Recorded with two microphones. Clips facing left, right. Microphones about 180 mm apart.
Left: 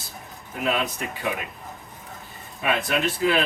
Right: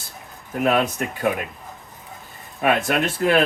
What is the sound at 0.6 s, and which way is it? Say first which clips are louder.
Speech: right 6 dB; 50° right (ahead or behind).